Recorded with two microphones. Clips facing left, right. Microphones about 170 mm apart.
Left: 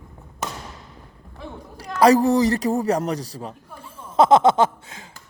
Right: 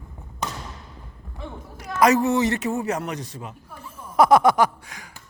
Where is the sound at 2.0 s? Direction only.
35° left (ahead or behind).